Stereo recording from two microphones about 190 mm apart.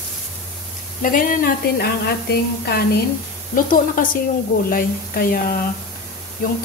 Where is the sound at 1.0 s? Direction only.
45° left (ahead or behind).